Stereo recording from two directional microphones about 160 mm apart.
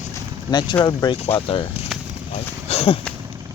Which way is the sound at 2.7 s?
40° left (ahead or behind).